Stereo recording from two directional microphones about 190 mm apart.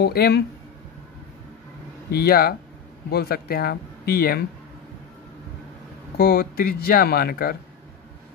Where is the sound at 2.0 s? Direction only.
55° left (ahead or behind).